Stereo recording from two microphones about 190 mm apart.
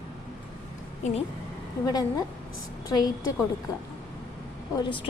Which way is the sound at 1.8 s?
20° left (ahead or behind).